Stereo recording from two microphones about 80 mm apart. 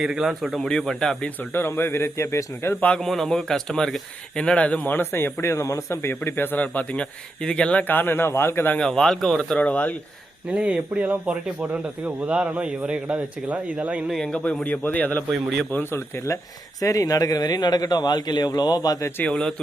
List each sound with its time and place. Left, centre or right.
0.0 s speech: centre
1.4 s speech: left
2.8 s a man's voice: centre; by 8.8 s left
8.8 s speech: centre
9.6 s a man's voice: centre
10.5 s a man's voice: centre
14.1 s speech: centre
14.6 s a man's voice: left
19.2 s speech: centre